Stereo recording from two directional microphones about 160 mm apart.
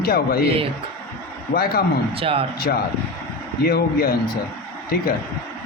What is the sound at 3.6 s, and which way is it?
Speech, 75° left (ahead or behind).